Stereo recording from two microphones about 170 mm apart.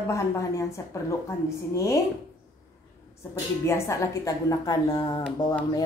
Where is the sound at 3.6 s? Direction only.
15° left (ahead or behind).